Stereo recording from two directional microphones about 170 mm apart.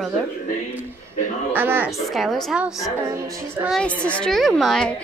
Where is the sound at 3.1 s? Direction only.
15° right (ahead or behind).